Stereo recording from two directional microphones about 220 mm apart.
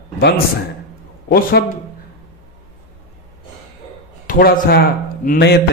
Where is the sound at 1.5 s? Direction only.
50° left (ahead or behind).